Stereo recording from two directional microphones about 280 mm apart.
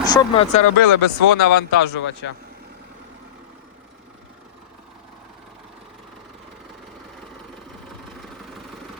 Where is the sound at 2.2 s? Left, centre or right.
Left.